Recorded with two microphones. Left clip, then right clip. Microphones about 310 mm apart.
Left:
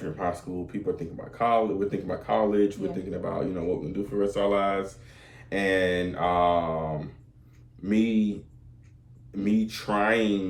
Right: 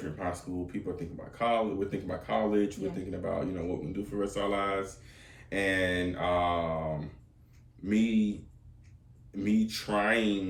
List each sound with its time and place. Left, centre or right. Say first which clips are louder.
0.2 s speech: left 5 dB; centre
7.9 s speech: left 4 dB; centre
9.3 s speech: left 3 dB; centre